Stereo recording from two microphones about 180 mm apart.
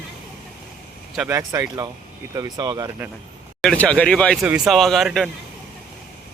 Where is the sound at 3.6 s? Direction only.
5° left (ahead or behind).